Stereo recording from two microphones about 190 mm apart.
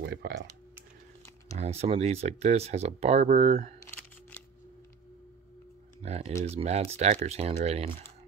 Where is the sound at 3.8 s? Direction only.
10° left (ahead or behind).